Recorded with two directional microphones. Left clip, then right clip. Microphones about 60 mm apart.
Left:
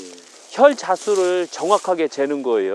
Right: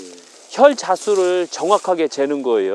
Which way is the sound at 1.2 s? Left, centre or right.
Right.